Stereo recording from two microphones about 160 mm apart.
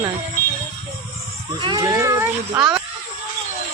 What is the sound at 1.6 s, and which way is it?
Speech, 25° right (ahead or behind).